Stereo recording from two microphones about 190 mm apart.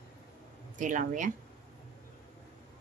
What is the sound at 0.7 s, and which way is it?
Speech, 40° right (ahead or behind).